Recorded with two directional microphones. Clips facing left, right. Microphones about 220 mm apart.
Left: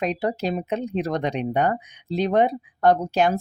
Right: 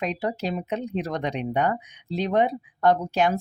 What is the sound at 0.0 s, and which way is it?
Speech, 40° left (ahead or behind).